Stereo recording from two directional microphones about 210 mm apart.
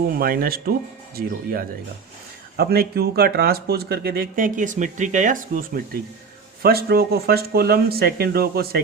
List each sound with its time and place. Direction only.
0.2 s speech: 45° right (ahead or behind)